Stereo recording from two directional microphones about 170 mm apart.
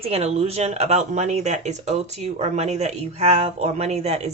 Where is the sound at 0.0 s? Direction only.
35° right (ahead or behind).